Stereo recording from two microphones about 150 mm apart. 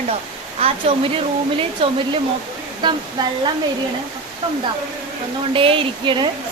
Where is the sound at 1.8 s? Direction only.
35° right (ahead or behind).